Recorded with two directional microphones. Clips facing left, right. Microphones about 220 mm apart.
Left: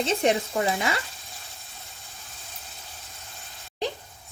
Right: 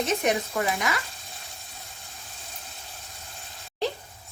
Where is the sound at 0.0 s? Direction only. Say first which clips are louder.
Left 2 dB; 30° left (ahead or behind).